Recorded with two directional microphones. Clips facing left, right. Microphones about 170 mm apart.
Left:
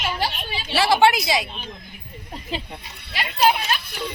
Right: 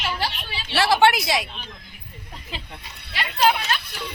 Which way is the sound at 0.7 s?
Centre (ahead or behind).